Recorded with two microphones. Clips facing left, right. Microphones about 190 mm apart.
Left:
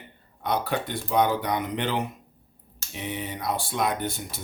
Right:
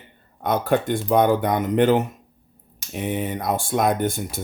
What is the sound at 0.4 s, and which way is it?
Speech, 50° right (ahead or behind).